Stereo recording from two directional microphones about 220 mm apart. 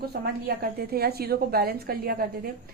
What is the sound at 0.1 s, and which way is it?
A woman's voice, 45° right (ahead or behind).